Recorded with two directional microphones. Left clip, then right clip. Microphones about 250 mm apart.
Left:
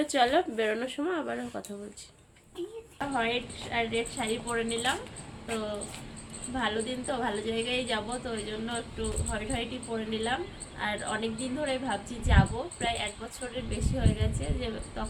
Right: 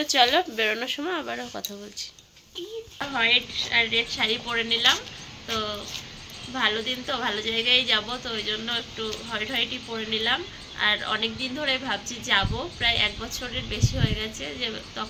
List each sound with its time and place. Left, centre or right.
0.1 s speech: centre
3.1 s a woman's voice: centre
6.5 s a woman's voice: centre